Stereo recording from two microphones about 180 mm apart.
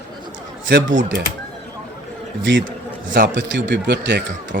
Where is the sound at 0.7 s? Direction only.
90° right.